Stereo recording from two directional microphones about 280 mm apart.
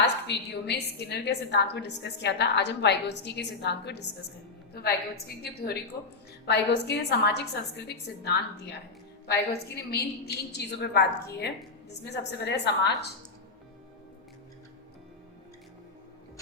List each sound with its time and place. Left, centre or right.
0.0 s a woman's voice: left